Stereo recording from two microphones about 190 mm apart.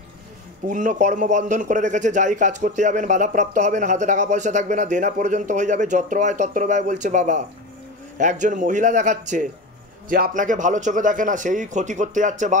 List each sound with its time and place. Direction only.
0.7 s speech: 40° right (ahead or behind)